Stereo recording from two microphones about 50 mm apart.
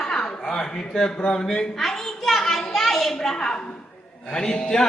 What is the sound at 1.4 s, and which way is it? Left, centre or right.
A child's voice, centre.